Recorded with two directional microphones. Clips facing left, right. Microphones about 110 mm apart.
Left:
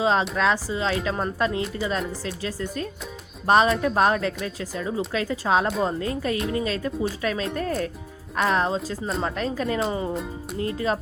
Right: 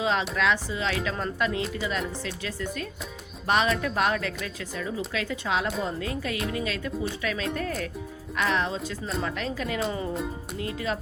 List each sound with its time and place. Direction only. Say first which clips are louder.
0.0 s speech: left 4 dB; 35° left (ahead or behind)